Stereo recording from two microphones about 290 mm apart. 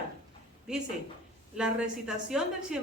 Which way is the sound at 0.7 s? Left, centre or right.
Centre.